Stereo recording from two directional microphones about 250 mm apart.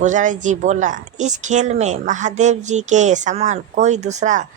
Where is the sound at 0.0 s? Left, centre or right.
Right.